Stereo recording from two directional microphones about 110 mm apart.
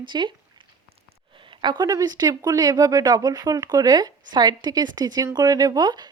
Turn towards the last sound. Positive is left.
turn(degrees=-40)  # may be behind; listen again after turning